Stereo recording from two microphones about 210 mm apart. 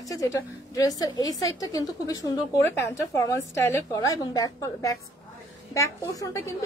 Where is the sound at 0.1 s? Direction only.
15° left (ahead or behind).